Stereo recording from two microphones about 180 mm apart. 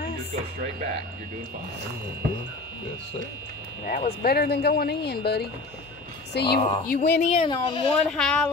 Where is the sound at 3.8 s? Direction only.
45° left (ahead or behind); by 6.6 s 65° left (ahead or behind).